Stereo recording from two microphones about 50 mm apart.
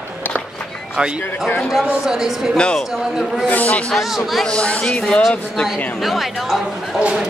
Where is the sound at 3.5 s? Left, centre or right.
Left.